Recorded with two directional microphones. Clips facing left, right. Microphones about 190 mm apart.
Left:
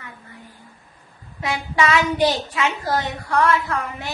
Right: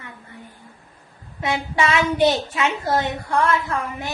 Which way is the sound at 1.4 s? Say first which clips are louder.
Even; 25° right (ahead or behind).